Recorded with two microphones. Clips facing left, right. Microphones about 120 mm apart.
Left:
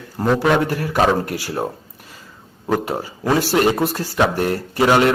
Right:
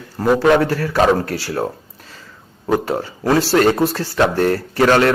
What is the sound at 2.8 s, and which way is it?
Speech, 10° left (ahead or behind).